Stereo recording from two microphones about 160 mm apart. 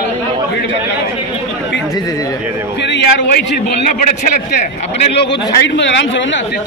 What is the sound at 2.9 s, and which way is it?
A man's voice, 85° left.